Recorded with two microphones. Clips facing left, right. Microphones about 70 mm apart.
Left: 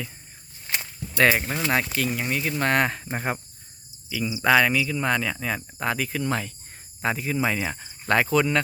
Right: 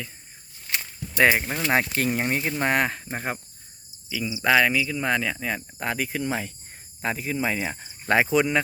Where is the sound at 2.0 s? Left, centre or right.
Right.